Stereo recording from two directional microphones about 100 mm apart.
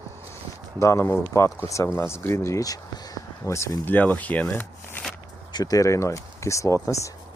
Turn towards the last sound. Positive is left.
turn(degrees=30)  # may be behind; listen again after turning